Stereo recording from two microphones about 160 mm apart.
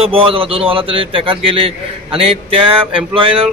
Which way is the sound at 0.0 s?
35° right (ahead or behind).